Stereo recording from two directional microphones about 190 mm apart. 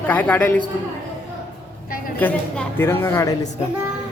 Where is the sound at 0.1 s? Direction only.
10° left (ahead or behind).